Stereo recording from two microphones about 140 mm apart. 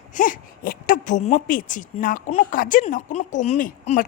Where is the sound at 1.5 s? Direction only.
75° left (ahead or behind).